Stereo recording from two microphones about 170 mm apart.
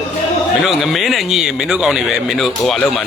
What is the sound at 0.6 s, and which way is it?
Speech, centre (ahead or behind).